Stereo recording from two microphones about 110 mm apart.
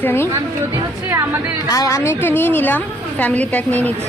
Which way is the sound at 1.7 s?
30° left (ahead or behind).